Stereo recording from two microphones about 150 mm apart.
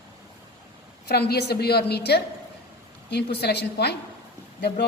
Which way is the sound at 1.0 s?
90° left.